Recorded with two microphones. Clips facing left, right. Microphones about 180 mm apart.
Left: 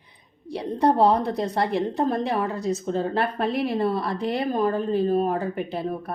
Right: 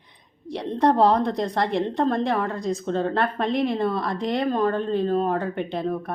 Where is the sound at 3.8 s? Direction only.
35° left (ahead or behind).